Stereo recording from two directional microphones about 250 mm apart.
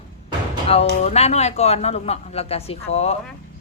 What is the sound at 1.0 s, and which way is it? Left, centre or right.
Speech, left.